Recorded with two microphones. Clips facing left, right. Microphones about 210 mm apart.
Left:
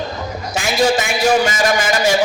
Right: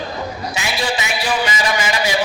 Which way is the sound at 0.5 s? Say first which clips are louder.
Left 9 dB; 45° left (ahead or behind).